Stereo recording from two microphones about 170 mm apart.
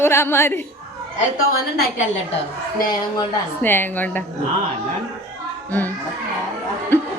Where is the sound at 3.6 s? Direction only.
10° left (ahead or behind).